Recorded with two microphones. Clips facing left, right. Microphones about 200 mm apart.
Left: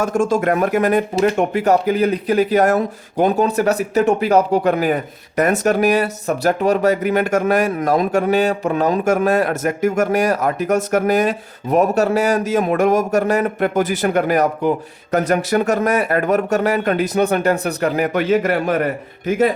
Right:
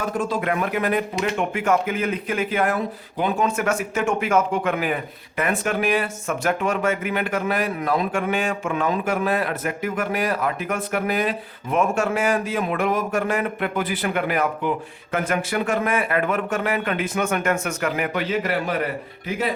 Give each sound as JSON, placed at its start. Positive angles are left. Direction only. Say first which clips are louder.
{"t": 0.0, "sound": "speech", "louder": "left 7 dB", "side_deg": 45}